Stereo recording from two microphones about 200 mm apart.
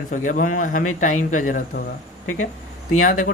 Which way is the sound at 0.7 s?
90° left.